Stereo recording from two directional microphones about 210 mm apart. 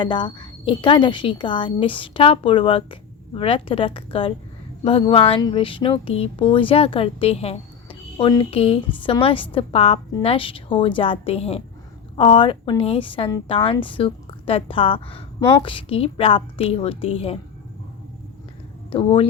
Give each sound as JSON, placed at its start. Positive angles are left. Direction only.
{"t": 0.0, "sound": "speech", "side_deg": 20}
{"t": 18.9, "sound": "speech", "side_deg": 25}